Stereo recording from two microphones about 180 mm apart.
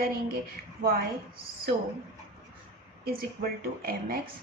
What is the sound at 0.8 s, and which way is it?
Speech, 55° right (ahead or behind).